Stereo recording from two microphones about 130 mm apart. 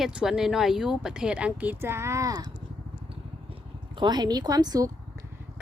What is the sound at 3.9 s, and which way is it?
Speech, 35° right (ahead or behind).